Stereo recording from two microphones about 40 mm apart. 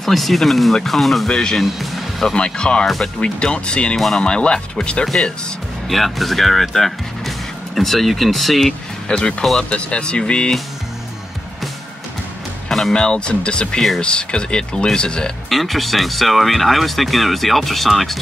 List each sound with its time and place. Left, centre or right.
0.0 s speech: centre
1.3 s speech: centre
1.6 s speech: centre
2.3 s speech: left
5.9 s speech: centre
9.0 s speech: left
12.6 s music: centre
12.9 s speech: left
15.5 s speech: centre